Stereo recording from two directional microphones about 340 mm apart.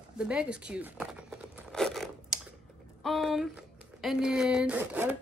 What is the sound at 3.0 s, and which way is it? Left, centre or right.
Speech, centre.